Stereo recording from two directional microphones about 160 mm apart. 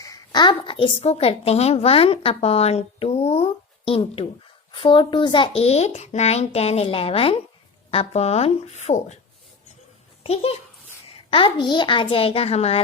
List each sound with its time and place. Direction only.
0.0 s a woman's voice: 25° left (ahead or behind); by 9.1 s 45° left (ahead or behind)
10.2 s a woman's voice: 40° left (ahead or behind)